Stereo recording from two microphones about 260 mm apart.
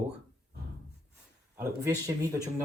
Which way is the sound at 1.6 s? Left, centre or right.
Centre.